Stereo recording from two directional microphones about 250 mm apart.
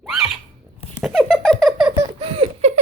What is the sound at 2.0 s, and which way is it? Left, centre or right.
Patter, right.